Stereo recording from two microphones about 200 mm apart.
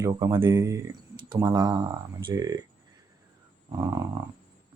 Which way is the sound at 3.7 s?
20° right (ahead or behind).